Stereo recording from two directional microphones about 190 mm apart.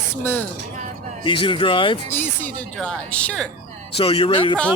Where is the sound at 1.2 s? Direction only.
25° left (ahead or behind).